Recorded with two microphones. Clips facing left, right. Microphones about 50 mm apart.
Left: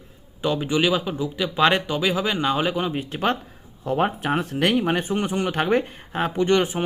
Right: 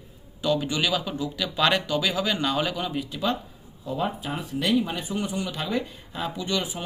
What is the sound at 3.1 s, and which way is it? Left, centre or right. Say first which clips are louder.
Speech: left 4 dB; left.